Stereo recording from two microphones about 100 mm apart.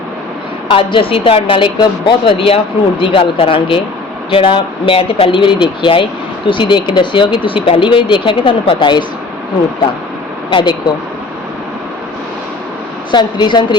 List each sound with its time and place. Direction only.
0.7 s a woman's voice: 60° left (ahead or behind)
10.5 s speech: 50° left (ahead or behind)
13.1 s speech: 50° left (ahead or behind)